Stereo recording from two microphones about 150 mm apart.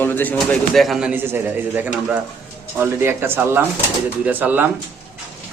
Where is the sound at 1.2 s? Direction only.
15° right (ahead or behind).